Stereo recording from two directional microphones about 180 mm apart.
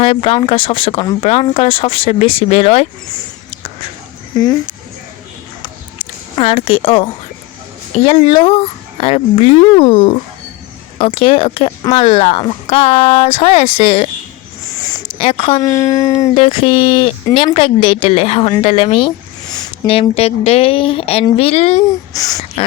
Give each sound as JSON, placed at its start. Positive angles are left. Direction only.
{"t": 0.0, "sound": "speech", "side_deg": 35}
{"t": 4.3, "sound": "speech", "side_deg": 20}
{"t": 6.3, "sound": "speech", "side_deg": 30}
{"t": 15.2, "sound": "speech", "side_deg": 30}
{"t": 15.6, "sound": "speech", "side_deg": 15}
{"t": 16.3, "sound": "speech", "side_deg": 35}
{"t": 22.1, "sound": "speech", "side_deg": 20}